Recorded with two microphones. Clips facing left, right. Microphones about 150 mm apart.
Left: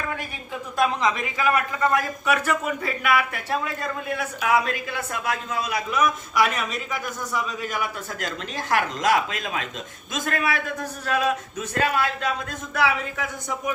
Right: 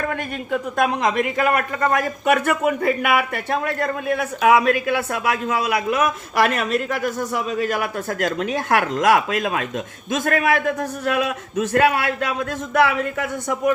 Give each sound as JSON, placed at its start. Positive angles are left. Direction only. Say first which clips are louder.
{"t": 0.5, "sound": "a man's voice", "louder": "right 3 dB", "side_deg": -55}